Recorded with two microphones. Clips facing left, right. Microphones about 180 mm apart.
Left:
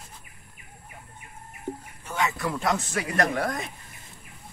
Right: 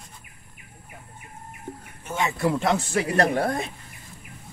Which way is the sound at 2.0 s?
25° right (ahead or behind).